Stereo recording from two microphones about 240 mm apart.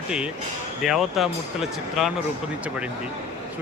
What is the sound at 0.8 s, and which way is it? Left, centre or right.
Speech, centre.